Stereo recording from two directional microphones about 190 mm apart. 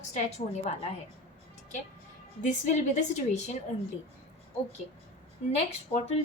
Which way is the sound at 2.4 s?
40° left (ahead or behind).